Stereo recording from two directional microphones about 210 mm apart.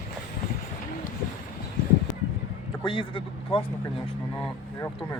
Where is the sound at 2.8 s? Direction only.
25° left (ahead or behind).